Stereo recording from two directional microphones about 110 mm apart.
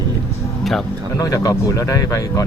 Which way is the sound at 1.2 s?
35° left (ahead or behind).